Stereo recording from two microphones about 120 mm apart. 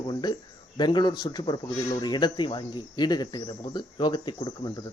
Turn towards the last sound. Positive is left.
turn(degrees=40)  # may be behind; listen again after turning